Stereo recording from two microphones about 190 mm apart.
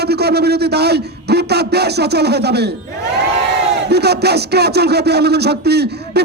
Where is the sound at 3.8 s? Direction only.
60° right (ahead or behind).